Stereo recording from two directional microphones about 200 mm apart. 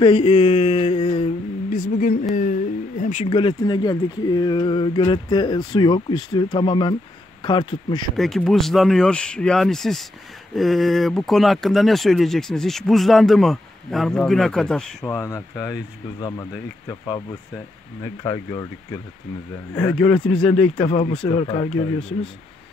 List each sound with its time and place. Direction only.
0.0 s mantra: 25° left (ahead or behind)
1.7 s speech: 45° left (ahead or behind)
3.3 s speech: 25° left (ahead or behind)
8.2 s speech: centre (ahead or behind); by 16.4 s 20° left (ahead or behind)
18.0 s speech: 15° left (ahead or behind)
19.7 s speech: 5° left (ahead or behind)
20.7 s speech: 25° left (ahead or behind)